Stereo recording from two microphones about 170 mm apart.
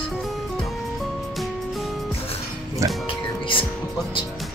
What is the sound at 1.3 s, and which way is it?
Music, centre (ahead or behind).